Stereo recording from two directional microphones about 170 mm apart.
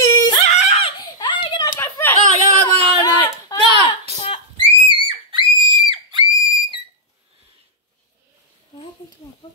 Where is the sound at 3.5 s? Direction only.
20° left (ahead or behind).